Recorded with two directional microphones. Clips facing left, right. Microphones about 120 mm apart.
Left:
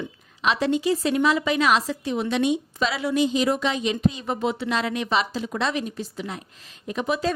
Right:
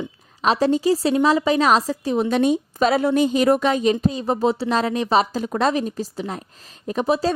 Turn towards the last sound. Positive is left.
turn(degrees=-35)  # may be behind; listen again after turning